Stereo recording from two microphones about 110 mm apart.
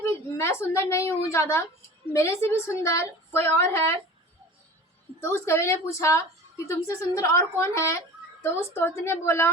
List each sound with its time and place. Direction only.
0.0 s a woman's voice: 25° left (ahead or behind)
5.2 s a woman's voice: 25° left (ahead or behind)